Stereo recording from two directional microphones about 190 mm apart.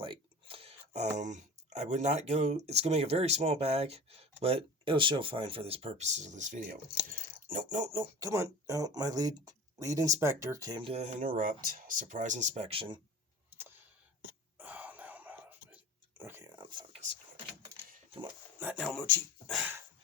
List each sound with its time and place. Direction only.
0.0 s speech: 25° right (ahead or behind)
7.9 s speech: 15° right (ahead or behind)
13.5 s a sound: 10° right (ahead or behind)
16.6 s a sound: 25° right (ahead or behind)
18.6 s speech: 5° right (ahead or behind)
19.0 s speech: 10° left (ahead or behind)
19.5 s dog: 10° right (ahead or behind)